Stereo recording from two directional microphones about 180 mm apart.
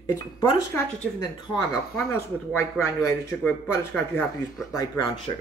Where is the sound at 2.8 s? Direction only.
5° left (ahead or behind).